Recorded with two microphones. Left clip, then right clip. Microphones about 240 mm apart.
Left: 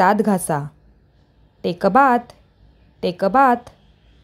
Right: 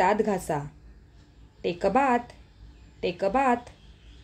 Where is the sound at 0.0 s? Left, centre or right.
Left.